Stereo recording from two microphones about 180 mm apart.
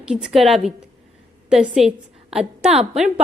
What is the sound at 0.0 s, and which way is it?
A woman's voice, 5° right (ahead or behind).